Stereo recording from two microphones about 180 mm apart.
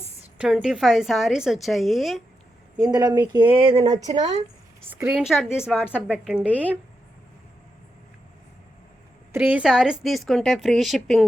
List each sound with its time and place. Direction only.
0.3 s a woman's voice: 5° right (ahead or behind)
2.8 s speech: 20° right (ahead or behind)
3.8 s speech: 20° right (ahead or behind)
4.1 s speech: 40° right (ahead or behind)
4.9 s a woman's voice: 10° right (ahead or behind)
9.3 s a woman's voice: 10° right (ahead or behind)